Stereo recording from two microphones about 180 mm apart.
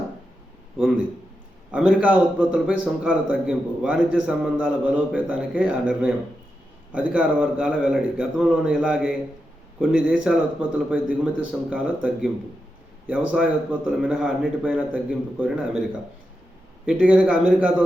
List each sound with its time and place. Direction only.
0.8 s a man's voice: 5° right (ahead or behind)
16.8 s a man's voice: 5° right (ahead or behind)